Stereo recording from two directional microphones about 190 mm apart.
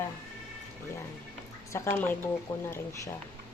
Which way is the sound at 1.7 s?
15° left (ahead or behind).